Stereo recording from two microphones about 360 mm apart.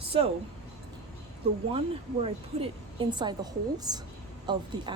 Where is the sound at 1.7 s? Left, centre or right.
Centre.